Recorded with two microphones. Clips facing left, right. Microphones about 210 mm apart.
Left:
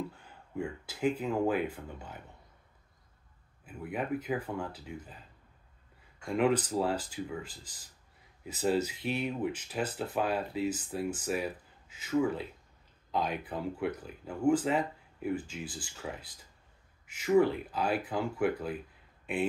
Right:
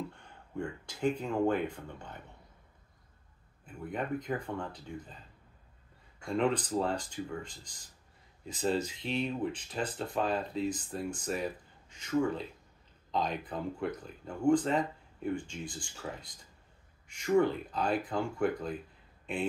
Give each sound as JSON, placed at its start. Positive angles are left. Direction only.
{"t": 0.1, "sound": "speech", "side_deg": 5}
{"t": 3.6, "sound": "speech", "side_deg": 5}
{"t": 6.2, "sound": "speech", "side_deg": 5}